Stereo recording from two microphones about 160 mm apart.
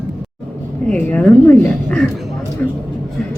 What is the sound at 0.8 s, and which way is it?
A man's voice, 5° left (ahead or behind).